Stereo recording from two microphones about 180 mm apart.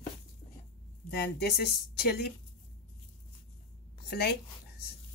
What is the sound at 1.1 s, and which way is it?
A woman's voice, 65° left (ahead or behind).